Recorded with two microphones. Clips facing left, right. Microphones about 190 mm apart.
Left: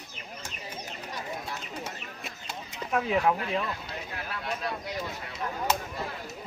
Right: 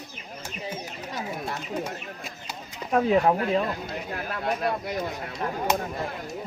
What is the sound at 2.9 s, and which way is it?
Speech, 40° right (ahead or behind).